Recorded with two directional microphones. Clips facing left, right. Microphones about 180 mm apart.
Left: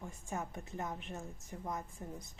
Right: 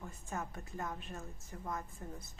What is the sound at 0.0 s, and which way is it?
A woman's voice, 15° left (ahead or behind).